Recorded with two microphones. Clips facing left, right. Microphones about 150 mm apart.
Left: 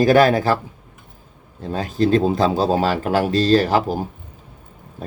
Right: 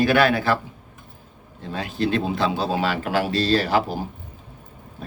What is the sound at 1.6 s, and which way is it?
Speech, 40° left (ahead or behind).